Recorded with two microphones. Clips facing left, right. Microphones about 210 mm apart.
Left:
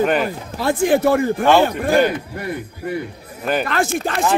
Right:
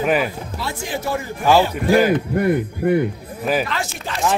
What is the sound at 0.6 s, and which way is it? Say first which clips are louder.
Speech: left 12 dB; 55° left (ahead or behind).